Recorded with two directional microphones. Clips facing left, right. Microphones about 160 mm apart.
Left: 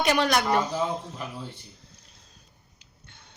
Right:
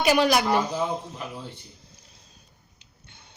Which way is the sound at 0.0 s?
5° right (ahead or behind).